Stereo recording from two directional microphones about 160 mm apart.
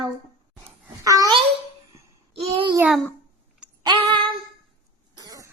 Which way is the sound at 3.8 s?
30° right (ahead or behind).